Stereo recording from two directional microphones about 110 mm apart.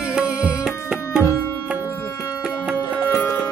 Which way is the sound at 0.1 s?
10° right (ahead or behind).